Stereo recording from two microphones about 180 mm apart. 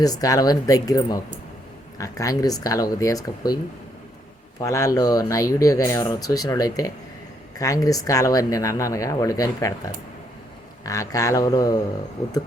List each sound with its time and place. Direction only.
0.0 s speech: 20° left (ahead or behind)
4.6 s speech: 20° left (ahead or behind)